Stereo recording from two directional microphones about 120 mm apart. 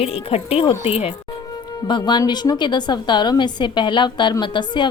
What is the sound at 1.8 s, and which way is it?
Speech, 40° left (ahead or behind).